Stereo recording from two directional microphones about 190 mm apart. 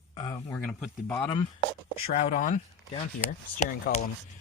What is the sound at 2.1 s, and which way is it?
Speech, 35° left (ahead or behind).